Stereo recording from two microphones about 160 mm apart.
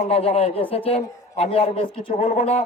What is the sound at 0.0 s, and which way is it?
A man's voice, 40° left (ahead or behind).